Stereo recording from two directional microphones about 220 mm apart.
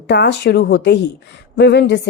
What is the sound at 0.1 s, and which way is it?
A woman's voice, 50° left (ahead or behind).